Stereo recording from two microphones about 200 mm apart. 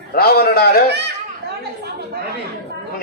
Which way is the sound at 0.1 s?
50° left (ahead or behind).